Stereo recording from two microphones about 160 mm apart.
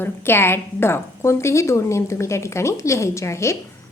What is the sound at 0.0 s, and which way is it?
A woman's voice, 15° left (ahead or behind).